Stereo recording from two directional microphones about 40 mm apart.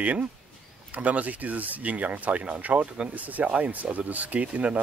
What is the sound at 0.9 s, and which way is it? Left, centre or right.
Speech, right.